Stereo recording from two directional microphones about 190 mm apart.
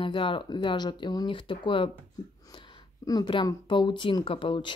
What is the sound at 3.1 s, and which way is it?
A woman's voice, 25° left (ahead or behind).